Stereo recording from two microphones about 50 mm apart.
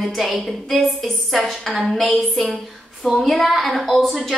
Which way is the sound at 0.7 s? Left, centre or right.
Centre.